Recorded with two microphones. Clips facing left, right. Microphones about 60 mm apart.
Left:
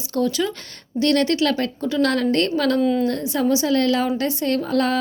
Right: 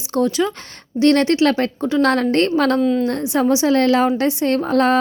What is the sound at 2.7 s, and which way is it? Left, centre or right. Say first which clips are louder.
Speech: right 2 dB; centre.